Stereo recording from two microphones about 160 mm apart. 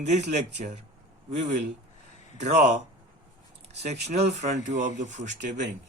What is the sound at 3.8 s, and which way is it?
Speech, 45° right (ahead or behind).